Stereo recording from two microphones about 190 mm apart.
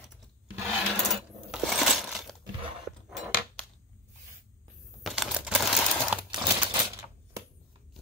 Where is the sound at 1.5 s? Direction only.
Centre (ahead or behind).